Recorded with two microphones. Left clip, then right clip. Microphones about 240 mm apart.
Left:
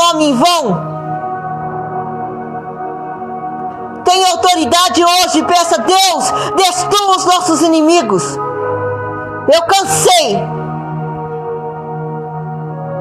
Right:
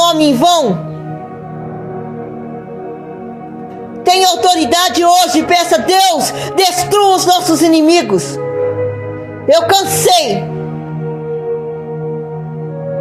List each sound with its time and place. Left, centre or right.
0.0 s a child's voice: centre
4.0 s a man's voice: centre
9.5 s a man's voice: centre